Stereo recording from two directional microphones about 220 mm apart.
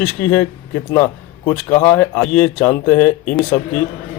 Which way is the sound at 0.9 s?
10° left (ahead or behind).